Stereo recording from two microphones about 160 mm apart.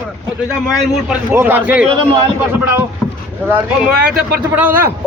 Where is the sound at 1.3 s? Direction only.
10° right (ahead or behind).